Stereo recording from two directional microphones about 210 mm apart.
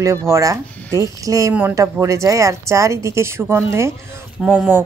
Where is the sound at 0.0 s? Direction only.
15° right (ahead or behind).